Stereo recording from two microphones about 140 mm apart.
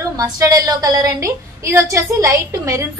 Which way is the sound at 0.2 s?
25° right (ahead or behind).